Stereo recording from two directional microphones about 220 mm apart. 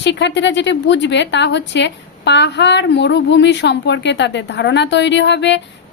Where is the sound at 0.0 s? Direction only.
55° left (ahead or behind).